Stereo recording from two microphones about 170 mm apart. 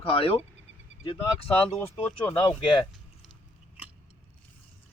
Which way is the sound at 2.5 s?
30° left (ahead or behind).